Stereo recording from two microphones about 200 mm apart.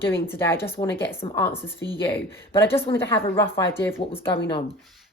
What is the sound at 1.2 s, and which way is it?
Speech, 25° left (ahead or behind).